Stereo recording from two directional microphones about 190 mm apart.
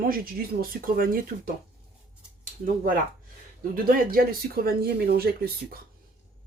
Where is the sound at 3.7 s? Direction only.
50° right (ahead or behind).